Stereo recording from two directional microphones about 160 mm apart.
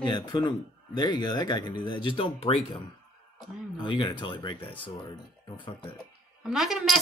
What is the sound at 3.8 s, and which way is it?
Speech, 30° left (ahead or behind).